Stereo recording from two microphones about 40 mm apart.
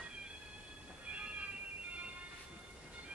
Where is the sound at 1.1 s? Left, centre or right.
Right.